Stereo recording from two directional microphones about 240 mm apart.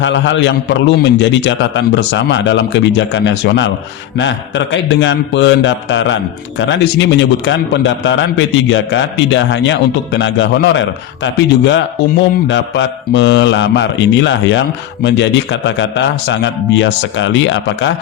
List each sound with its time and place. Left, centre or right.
0.0 s a man's voice: left